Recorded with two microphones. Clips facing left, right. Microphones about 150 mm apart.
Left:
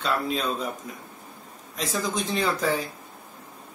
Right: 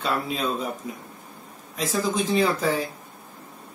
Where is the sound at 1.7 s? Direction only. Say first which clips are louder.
Right 3 dB; 5° right (ahead or behind).